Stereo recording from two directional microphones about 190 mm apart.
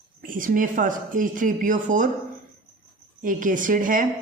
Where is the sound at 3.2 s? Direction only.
45° right (ahead or behind).